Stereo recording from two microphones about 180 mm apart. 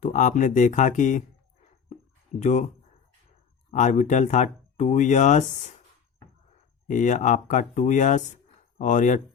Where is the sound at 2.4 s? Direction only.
40° left (ahead or behind).